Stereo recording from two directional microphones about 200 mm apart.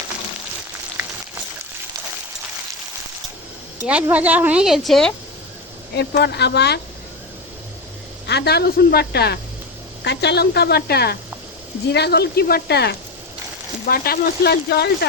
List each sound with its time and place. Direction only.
3.8 s speech: 5° right (ahead or behind)
5.9 s speech: 55° left (ahead or behind)
8.3 s a woman's voice: 55° left (ahead or behind)